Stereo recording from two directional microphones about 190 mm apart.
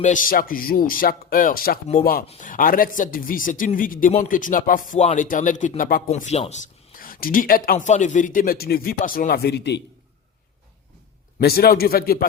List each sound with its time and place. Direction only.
0.0 s speech: 45° left (ahead or behind)
2.2 s speech: 30° left (ahead or behind)
2.5 s speech: 45° left (ahead or behind)
6.1 s speech: 35° left (ahead or behind); by 9.8 s 60° left (ahead or behind)
11.3 s speech: 55° left (ahead or behind)